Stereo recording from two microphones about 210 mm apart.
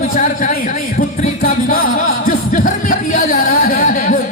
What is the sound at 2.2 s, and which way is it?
Music, 40° left (ahead or behind).